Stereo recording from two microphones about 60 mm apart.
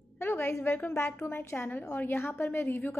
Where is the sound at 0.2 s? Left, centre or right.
Left.